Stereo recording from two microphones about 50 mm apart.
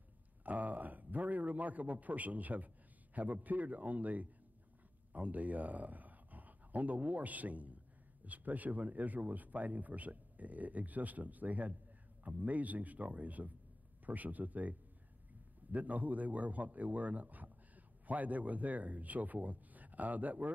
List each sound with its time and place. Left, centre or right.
0.4 s a man's voice: right